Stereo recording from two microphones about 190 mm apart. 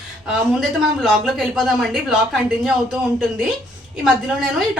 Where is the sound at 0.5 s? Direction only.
Centre (ahead or behind).